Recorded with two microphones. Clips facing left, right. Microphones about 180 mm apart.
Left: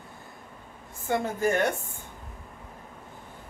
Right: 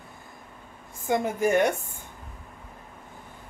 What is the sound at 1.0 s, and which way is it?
Speech, 15° right (ahead or behind).